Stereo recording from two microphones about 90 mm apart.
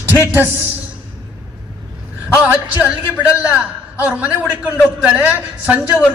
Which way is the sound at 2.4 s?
15° right (ahead or behind).